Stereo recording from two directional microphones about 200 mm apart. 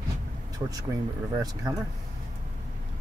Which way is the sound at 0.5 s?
20° right (ahead or behind).